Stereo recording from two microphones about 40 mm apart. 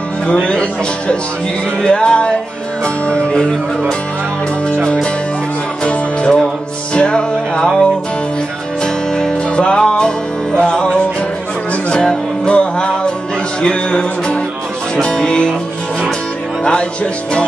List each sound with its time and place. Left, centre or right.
0.5 s speech: left
5.9 s music: left
12.4 s music: left
13.6 s a sound: left
15.0 s music: left
16.6 s music: left